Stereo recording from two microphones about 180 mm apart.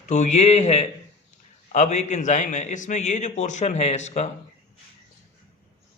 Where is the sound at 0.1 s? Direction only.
40° left (ahead or behind).